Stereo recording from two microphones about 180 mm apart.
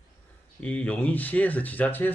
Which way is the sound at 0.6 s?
10° left (ahead or behind).